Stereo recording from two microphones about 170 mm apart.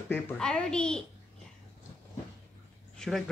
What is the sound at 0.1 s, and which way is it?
Speech, 5° left (ahead or behind).